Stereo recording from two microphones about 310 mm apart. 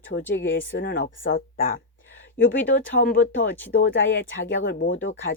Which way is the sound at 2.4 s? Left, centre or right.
Left.